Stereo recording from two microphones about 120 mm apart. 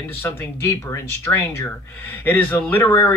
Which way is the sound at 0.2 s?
20° left (ahead or behind).